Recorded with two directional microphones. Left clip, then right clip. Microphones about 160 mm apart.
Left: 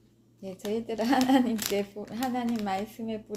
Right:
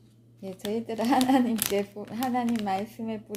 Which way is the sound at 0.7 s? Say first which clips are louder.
Right 1 dB; 10° right (ahead or behind).